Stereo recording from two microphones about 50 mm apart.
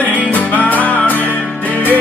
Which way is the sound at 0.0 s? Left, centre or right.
Left.